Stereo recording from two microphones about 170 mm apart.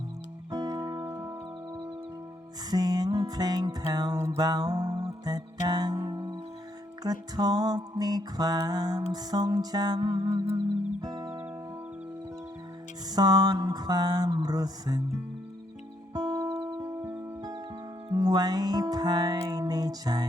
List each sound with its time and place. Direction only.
0.5 s music: 20° right (ahead or behind)
13.1 s music: 20° right (ahead or behind)
16.1 s music: 20° right (ahead or behind)